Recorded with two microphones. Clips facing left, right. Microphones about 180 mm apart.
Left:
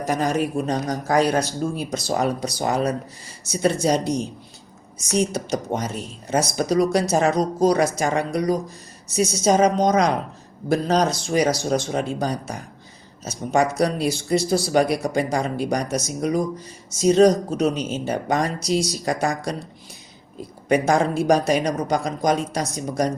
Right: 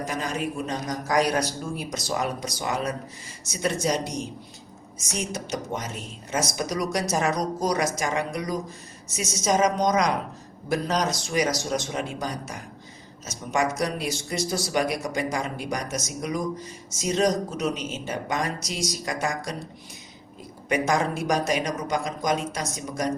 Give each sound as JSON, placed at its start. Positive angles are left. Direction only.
{"t": 0.1, "sound": "speech", "side_deg": 45}
{"t": 20.7, "sound": "speech", "side_deg": 30}